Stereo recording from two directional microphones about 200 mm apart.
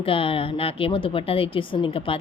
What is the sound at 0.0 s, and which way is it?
A woman's voice, 25° left (ahead or behind).